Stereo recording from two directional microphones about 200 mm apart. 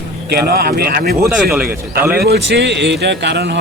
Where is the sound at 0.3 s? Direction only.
50° right (ahead or behind).